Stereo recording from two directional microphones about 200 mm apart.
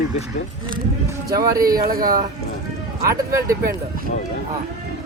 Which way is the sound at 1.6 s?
45° right (ahead or behind).